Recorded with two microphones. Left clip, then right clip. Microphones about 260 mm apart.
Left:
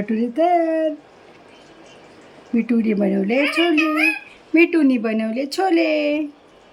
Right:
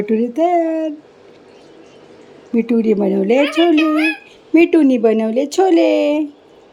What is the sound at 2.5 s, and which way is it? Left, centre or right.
Speech, centre.